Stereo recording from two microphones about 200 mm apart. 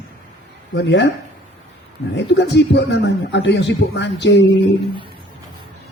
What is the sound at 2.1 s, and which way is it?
A man's voice, 60° left (ahead or behind).